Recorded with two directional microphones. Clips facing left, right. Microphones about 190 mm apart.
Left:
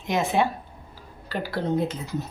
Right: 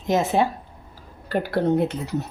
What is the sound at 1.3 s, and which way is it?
Speech, 55° right (ahead or behind).